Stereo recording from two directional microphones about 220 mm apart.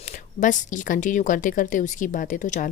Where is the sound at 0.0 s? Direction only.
35° left (ahead or behind).